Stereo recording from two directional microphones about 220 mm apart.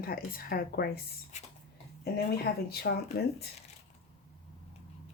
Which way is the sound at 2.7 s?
45° left (ahead or behind).